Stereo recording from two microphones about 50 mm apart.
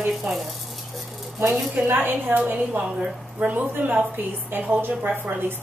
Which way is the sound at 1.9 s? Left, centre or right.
Right.